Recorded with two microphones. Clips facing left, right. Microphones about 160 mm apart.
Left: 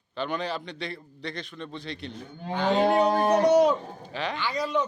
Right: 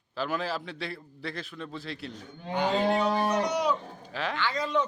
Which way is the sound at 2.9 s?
45° left (ahead or behind).